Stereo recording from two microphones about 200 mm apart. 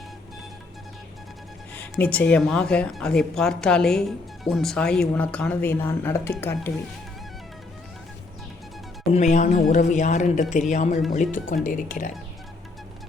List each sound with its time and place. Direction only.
1.7 s speech: 10° left (ahead or behind)
9.1 s speech: 35° left (ahead or behind)